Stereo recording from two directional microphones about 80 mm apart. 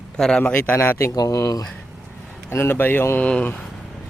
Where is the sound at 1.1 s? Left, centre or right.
Left.